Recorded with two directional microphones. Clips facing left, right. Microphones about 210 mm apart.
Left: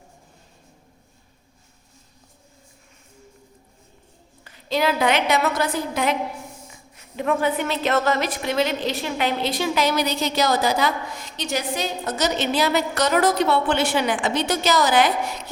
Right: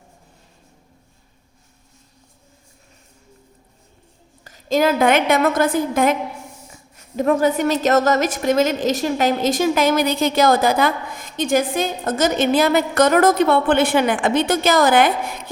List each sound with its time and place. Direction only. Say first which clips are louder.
4.4 s a woman's voice: right 5 dB; 45° right (ahead or behind)